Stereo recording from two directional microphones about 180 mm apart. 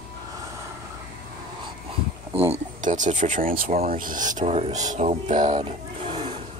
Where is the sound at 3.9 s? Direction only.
50° right (ahead or behind).